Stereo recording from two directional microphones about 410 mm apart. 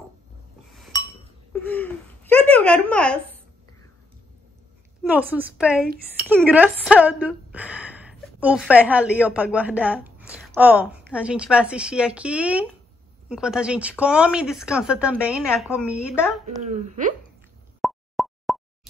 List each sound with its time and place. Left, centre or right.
0.7 s chink: centre
1.5 s a sound: centre
5.0 s a woman's voice: centre
16.4 s a woman's voice: centre
17.8 s plop: centre